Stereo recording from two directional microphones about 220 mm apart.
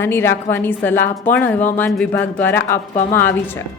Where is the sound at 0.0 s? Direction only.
10° left (ahead or behind).